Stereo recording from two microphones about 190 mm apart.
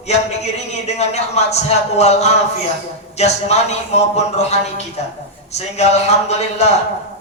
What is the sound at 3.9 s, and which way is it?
A man's voice, 35° left (ahead or behind).